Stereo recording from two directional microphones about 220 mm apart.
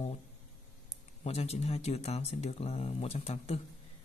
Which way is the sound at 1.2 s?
30° left (ahead or behind).